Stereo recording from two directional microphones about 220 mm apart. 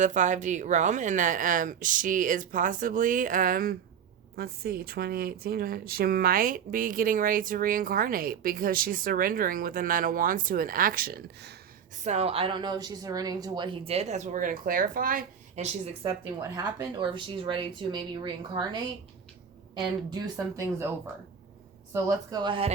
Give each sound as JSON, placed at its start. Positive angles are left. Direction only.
{"t": 0.0, "sound": "a woman's voice", "side_deg": -35}
{"t": 12.0, "sound": "speech", "side_deg": -30}
{"t": 16.4, "sound": "speech", "side_deg": -15}
{"t": 21.9, "sound": "speech", "side_deg": -15}